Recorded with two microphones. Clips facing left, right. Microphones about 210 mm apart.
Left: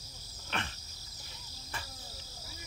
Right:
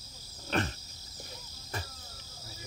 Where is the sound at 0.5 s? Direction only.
40° right (ahead or behind).